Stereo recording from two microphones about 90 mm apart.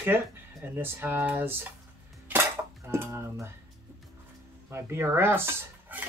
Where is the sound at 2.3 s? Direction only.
20° right (ahead or behind).